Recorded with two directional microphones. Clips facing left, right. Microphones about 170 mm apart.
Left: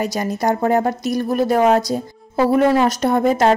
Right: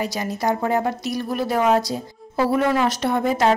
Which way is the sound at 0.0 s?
45° left (ahead or behind).